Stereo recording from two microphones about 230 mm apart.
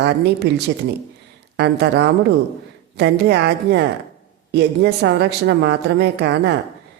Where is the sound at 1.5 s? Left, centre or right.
Right.